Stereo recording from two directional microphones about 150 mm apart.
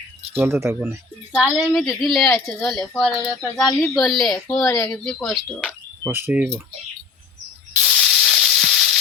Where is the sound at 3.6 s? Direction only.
Centre (ahead or behind).